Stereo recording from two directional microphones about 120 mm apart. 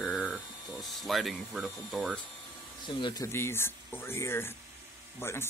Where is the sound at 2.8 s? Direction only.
40° left (ahead or behind).